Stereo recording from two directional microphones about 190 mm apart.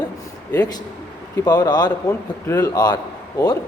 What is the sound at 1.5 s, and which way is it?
A man's voice, 20° left (ahead or behind).